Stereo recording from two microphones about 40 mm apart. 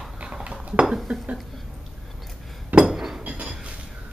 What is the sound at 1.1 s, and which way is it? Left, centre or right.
Speech, right.